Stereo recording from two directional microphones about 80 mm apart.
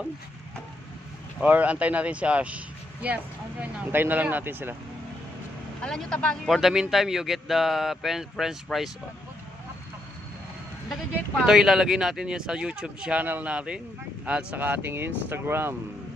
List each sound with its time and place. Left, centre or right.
1.4 s speech: centre
5.8 s speech: centre
6.5 s a man's voice: centre
11.4 s speech: centre
13.2 s speech: right
13.5 s speech: centre; by 15.7 s right